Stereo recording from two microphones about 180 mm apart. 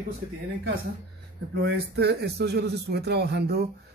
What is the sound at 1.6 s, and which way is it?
Speech, 65° right (ahead or behind).